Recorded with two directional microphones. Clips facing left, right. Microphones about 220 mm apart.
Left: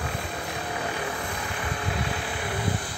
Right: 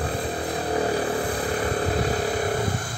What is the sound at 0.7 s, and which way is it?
Vehicle, 35° right (ahead or behind).